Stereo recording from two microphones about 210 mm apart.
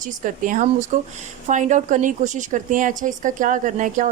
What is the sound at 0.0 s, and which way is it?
A woman's voice, 40° right (ahead or behind).